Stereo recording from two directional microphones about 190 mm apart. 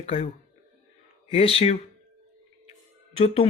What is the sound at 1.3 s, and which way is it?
Speech, 30° left (ahead or behind).